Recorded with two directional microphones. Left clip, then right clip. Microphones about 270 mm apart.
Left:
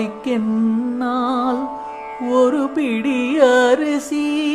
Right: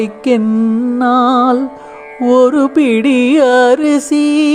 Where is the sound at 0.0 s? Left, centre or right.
Right.